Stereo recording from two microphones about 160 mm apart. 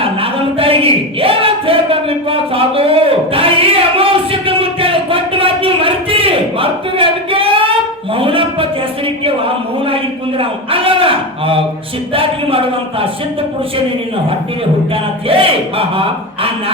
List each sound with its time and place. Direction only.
0.0 s a sound: 35° right (ahead or behind)
12.1 s speech: 35° right (ahead or behind)
15.3 s a man's voice: 35° right (ahead or behind)